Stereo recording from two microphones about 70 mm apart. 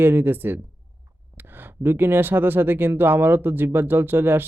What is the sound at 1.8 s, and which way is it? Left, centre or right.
Speech, right.